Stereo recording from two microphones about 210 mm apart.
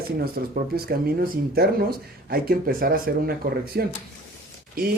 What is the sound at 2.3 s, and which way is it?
Speech, 45° right (ahead or behind).